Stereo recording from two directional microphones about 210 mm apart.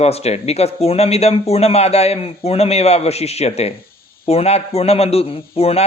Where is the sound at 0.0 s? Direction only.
30° left (ahead or behind).